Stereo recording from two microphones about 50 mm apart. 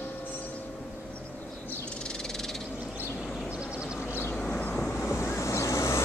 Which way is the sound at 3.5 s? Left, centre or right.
Centre.